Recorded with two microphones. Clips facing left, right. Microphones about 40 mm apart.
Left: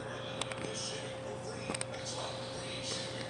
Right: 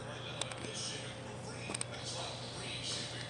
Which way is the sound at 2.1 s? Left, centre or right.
Centre.